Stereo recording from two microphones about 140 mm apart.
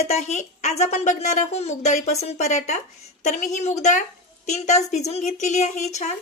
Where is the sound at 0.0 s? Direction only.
50° left (ahead or behind).